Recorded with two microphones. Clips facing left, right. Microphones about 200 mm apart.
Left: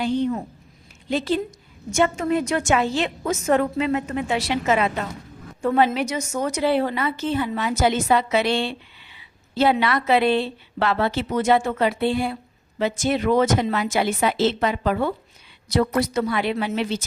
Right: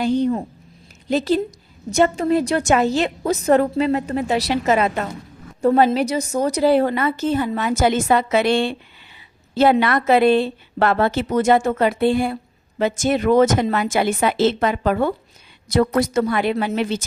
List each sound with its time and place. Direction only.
0.0 s a woman's voice: 40° right (ahead or behind)